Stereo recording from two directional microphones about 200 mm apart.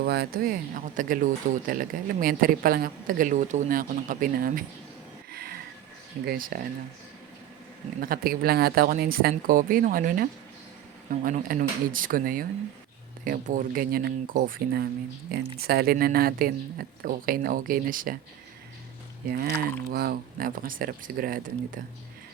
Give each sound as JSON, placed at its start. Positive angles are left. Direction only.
{"t": 0.0, "sound": "speech", "side_deg": -50}
{"t": 5.3, "sound": "a sound", "side_deg": -50}
{"t": 6.2, "sound": "speech", "side_deg": -45}
{"t": 8.0, "sound": "speech", "side_deg": -45}
{"t": 19.3, "sound": "speech", "side_deg": -50}